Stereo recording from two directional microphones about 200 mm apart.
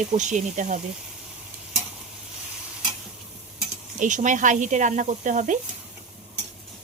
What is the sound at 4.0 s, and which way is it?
Speech, 40° right (ahead or behind).